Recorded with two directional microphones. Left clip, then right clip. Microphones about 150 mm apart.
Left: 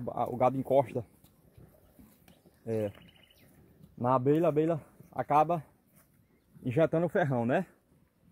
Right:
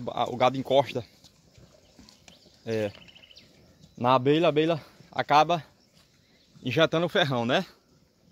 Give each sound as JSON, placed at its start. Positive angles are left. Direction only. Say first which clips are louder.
{"t": 0.0, "sound": "speech", "louder": "right 4 dB", "side_deg": -10}
{"t": 2.6, "sound": "speech", "louder": "right 4 dB", "side_deg": -15}
{"t": 4.0, "sound": "speech", "louder": "right 5 dB", "side_deg": -15}